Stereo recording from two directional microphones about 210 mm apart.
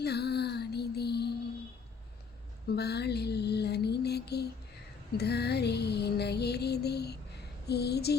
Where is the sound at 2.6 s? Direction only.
50° left (ahead or behind).